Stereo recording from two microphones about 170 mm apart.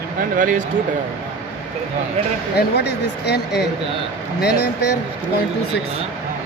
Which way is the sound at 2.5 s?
75° left (ahead or behind).